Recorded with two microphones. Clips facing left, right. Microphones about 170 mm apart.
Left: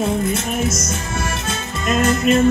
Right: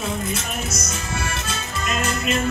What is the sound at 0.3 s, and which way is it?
Music, 50° left (ahead or behind).